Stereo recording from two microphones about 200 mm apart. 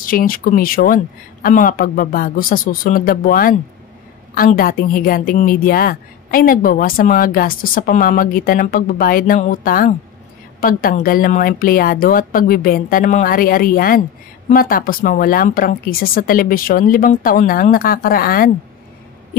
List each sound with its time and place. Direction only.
0.0 s a woman's voice: 45° left (ahead or behind)